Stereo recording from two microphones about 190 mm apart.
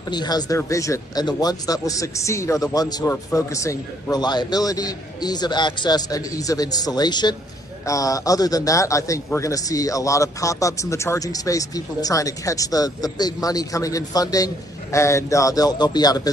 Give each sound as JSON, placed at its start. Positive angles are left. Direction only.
{"t": 0.1, "sound": "a man's voice", "side_deg": 20}